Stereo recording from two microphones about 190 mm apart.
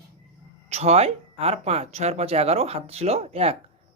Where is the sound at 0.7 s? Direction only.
35° right (ahead or behind).